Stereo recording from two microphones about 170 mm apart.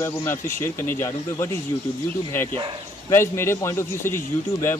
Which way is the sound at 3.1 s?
15° left (ahead or behind).